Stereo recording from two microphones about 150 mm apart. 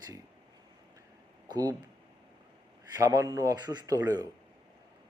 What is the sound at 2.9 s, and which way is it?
A man's voice, 20° right (ahead or behind).